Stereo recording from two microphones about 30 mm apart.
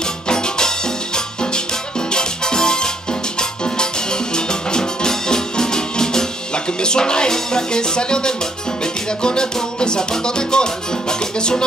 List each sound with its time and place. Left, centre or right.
0.3 s music: left